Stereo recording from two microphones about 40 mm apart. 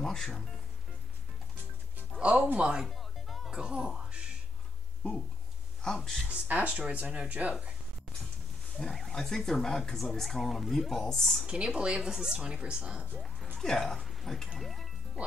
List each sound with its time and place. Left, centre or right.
0.0 s music: centre
2.1 s music: right
2.4 s speech: right
2.9 s music: centre
3.5 s speech: right
5.9 s speech: centre
6.5 s speech: right
8.8 s speech: centre
11.4 s speech: right
13.6 s speech: centre
13.9 s speech: centre